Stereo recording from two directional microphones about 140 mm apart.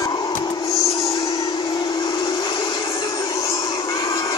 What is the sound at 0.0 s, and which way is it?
Music, 25° left (ahead or behind).